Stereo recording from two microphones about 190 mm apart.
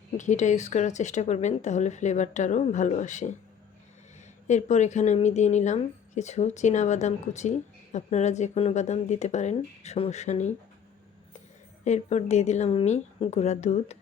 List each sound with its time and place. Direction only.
0.2 s speech: 40° left (ahead or behind)
4.4 s speech: 40° left (ahead or behind)
11.9 s speech: 35° left (ahead or behind)